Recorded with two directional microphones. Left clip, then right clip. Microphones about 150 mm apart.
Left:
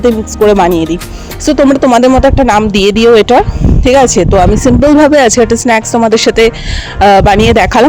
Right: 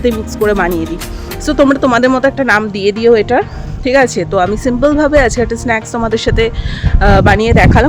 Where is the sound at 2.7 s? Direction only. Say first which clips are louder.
Left 7 dB; 60° left (ahead or behind).